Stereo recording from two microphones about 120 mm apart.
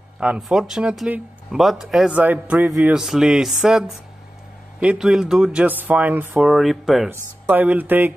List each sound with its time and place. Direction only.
0.2 s speech: 10° right (ahead or behind)
6.3 s speech: centre (ahead or behind)
7.1 s speech: 15° right (ahead or behind)